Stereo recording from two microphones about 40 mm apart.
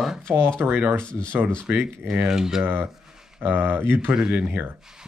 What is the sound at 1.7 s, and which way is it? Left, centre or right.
Speech, right.